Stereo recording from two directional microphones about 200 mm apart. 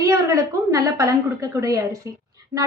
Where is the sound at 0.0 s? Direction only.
15° right (ahead or behind).